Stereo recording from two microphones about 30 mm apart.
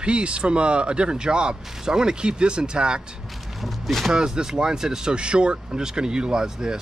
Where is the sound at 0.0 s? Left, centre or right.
Right.